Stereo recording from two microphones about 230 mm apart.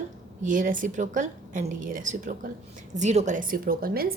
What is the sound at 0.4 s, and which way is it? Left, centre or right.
A woman's voice, right.